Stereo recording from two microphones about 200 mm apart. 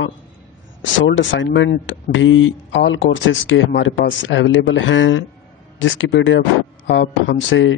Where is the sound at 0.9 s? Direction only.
70° left (ahead or behind).